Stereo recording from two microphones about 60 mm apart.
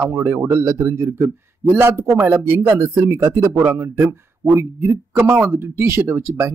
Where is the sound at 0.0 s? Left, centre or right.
Right.